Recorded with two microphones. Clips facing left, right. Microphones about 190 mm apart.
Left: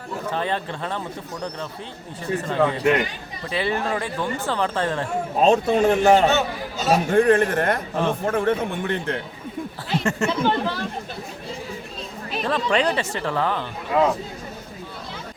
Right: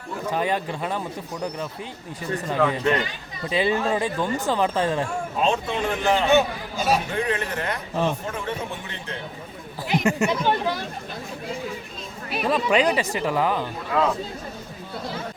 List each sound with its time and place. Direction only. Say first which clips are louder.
0.3 s speech: right 2 dB; 10° right (ahead or behind)
2.6 s speech: left 2 dB; 15° left (ahead or behind)
3.5 s speech: right 2 dB; 15° right (ahead or behind)
5.4 s speech: left 7 dB; 40° left (ahead or behind)
6.3 s speech: right 4 dB; 10° right (ahead or behind)
6.9 s speech: left 9 dB; 50° left (ahead or behind)
9.8 s speech: right 2 dB; 20° right (ahead or behind)
12.3 s speech: right 1 dB; 10° right (ahead or behind)
13.9 s speech: left 3 dB; 20° left (ahead or behind)